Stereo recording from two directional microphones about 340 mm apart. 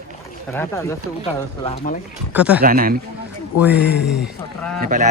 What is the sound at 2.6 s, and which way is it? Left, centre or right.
Speech, right.